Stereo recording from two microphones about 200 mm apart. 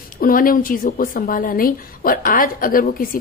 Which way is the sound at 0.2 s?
45° left (ahead or behind).